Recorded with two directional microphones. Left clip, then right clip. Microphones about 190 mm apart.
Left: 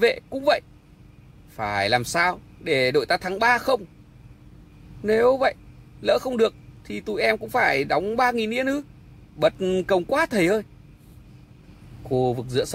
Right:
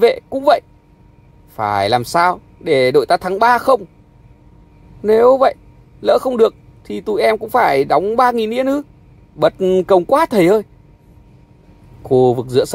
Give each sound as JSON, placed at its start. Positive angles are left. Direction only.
{"t": 0.0, "sound": "speech", "side_deg": -15}
{"t": 5.0, "sound": "speech", "side_deg": -15}